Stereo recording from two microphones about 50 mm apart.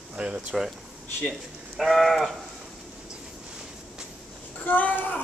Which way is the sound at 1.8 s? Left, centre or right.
Centre.